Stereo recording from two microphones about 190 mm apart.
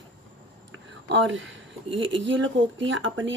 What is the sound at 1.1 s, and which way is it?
Speech, 80° right.